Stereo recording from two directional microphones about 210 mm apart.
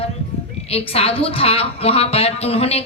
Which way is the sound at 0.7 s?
30° left (ahead or behind).